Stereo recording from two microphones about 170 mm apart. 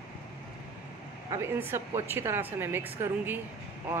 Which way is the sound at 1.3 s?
15° right (ahead or behind).